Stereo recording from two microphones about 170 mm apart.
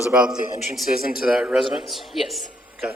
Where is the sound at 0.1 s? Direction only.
5° right (ahead or behind).